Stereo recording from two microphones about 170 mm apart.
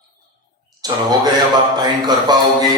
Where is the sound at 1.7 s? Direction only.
25° right (ahead or behind).